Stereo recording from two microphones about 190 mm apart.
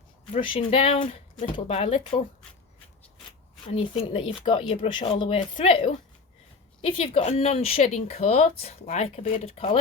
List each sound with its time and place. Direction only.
0.3 s speech: 25° left (ahead or behind)
3.7 s speech: 30° left (ahead or behind)